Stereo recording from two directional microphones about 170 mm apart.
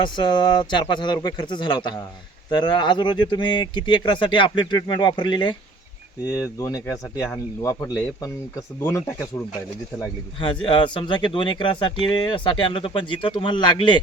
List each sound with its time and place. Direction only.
0.2 s speech: 25° left (ahead or behind)
6.6 s speech: 20° left (ahead or behind)
10.4 s speech: 30° left (ahead or behind)